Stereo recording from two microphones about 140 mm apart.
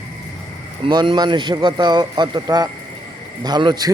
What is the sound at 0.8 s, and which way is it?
A man's voice, 35° right (ahead or behind).